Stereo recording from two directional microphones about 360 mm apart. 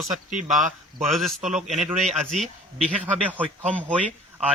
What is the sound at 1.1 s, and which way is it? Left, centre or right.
Speech, centre.